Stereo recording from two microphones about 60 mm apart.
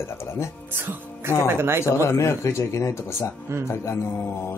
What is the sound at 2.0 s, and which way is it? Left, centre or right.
Speech, left.